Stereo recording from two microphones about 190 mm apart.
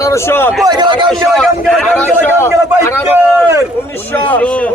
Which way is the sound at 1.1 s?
Centre (ahead or behind).